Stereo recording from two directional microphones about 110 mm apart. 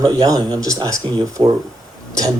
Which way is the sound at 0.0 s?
35° right (ahead or behind).